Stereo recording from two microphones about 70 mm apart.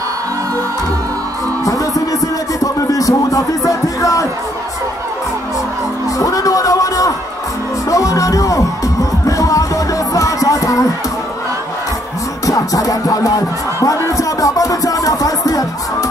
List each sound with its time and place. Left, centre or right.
1.6 s music: left
2.6 s speech: left
6.1 s music: left
12.4 s music: left
13.7 s speech: left